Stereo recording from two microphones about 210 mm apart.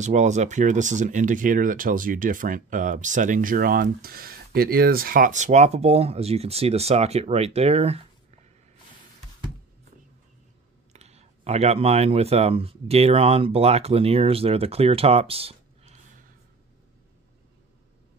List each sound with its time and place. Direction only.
0.0 s speech: 35° right (ahead or behind)
10.9 s speech: 30° right (ahead or behind)